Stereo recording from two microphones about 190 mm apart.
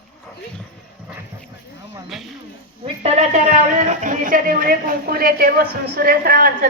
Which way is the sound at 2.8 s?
35° right (ahead or behind).